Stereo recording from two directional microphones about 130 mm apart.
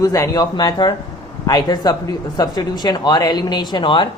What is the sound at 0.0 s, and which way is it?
Speech, 25° left (ahead or behind).